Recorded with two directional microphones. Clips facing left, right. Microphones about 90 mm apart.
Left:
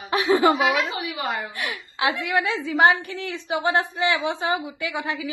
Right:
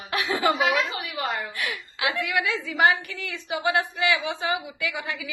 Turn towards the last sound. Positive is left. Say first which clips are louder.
# left 3 dB
turn(degrees=30)  # may be behind; listen again after turning